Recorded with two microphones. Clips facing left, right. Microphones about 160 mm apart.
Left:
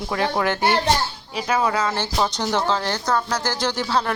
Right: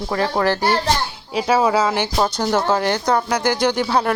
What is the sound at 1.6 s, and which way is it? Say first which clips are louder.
Speech: right 5 dB; 20° right (ahead or behind).